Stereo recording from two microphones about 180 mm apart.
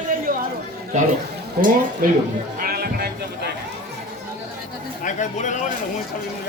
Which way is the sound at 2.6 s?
60° right (ahead or behind).